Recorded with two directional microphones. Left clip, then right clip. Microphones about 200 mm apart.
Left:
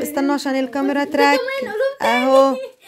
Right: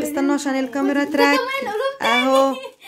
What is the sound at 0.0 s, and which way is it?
Speech, 25° left (ahead or behind).